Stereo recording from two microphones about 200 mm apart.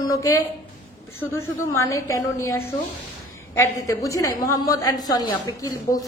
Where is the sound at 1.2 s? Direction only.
10° left (ahead or behind).